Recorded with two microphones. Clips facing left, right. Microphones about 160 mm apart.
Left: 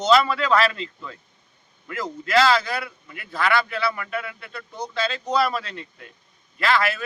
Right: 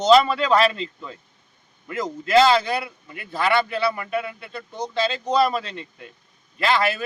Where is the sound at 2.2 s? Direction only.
25° right (ahead or behind).